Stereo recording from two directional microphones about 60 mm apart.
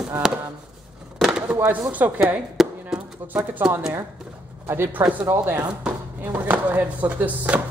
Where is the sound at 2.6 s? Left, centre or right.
Centre.